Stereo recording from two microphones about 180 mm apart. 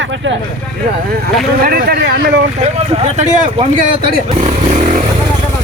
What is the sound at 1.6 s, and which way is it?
Speech, 60° right (ahead or behind).